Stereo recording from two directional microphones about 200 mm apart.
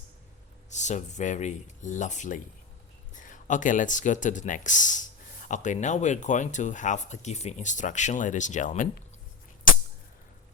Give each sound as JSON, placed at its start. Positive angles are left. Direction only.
{"t": 0.7, "sound": "speech", "side_deg": 35}